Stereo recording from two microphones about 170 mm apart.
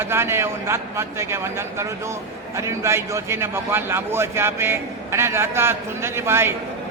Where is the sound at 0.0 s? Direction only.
15° right (ahead or behind).